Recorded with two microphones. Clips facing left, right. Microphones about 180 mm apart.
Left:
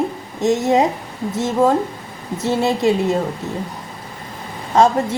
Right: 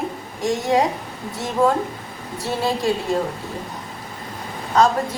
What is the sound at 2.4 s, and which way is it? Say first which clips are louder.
Speech: left 5 dB; 20° left (ahead or behind).